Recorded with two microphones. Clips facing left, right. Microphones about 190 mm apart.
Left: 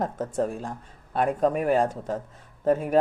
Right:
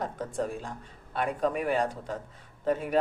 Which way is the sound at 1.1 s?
45° left (ahead or behind).